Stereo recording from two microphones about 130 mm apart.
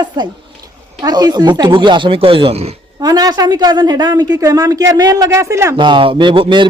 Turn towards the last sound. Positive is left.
turn(degrees=-40)  # may be behind; listen again after turning